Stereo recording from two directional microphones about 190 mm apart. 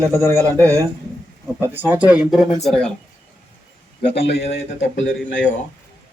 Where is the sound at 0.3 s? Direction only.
10° left (ahead or behind).